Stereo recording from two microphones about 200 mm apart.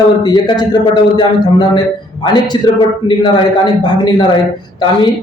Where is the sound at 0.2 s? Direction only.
20° left (ahead or behind).